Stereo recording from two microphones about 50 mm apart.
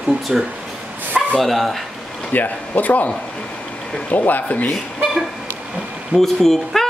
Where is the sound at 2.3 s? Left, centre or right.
Left.